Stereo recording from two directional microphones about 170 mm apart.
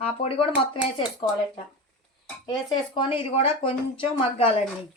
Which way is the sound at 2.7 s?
30° left (ahead or behind).